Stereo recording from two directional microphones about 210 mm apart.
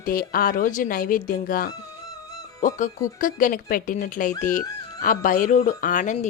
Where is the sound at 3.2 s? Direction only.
40° left (ahead or behind).